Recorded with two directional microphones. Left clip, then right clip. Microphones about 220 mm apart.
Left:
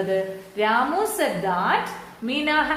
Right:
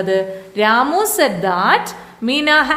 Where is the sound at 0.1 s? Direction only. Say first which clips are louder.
Right 7 dB; 50° right (ahead or behind).